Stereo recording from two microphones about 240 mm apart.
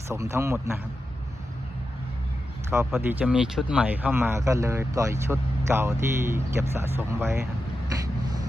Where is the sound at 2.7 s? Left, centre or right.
Centre.